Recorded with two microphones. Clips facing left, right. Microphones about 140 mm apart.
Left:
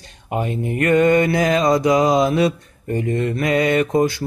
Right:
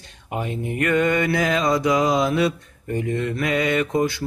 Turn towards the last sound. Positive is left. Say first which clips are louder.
# left 4 dB
turn(degrees=40)  # may be behind; listen again after turning